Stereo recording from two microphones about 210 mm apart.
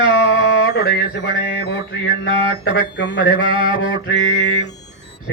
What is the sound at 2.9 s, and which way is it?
Mantra, 55° left (ahead or behind).